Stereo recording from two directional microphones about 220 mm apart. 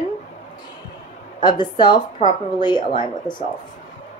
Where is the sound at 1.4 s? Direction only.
20° left (ahead or behind).